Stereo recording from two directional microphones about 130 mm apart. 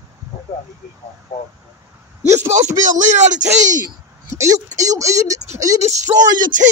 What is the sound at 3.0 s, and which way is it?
Speech, 70° right (ahead or behind).